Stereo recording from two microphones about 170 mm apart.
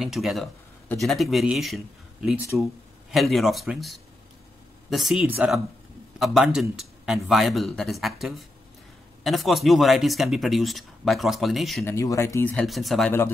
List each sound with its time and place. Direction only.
0.0 s speech: centre (ahead or behind)
11.8 s speech: 15° left (ahead or behind)
12.6 s speech: centre (ahead or behind)